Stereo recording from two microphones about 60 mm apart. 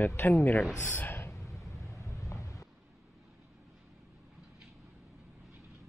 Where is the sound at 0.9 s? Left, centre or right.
Left.